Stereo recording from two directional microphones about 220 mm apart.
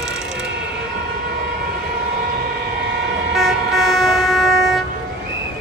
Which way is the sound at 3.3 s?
Centre (ahead or behind).